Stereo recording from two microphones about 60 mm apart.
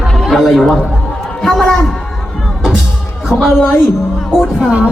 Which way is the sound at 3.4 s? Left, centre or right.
Centre.